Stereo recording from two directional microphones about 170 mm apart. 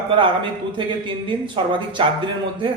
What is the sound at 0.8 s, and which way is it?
A man's voice, 30° right (ahead or behind).